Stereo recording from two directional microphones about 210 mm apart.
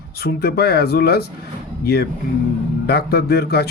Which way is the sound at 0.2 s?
50° left (ahead or behind).